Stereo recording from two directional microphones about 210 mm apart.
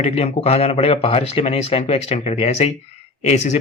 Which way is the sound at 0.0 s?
30° left (ahead or behind).